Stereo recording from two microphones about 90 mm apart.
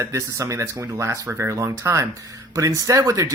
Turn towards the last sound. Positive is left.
turn(degrees=-35)  # may be behind; listen again after turning